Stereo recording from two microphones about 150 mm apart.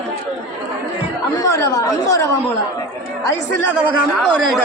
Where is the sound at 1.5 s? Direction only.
25° left (ahead or behind).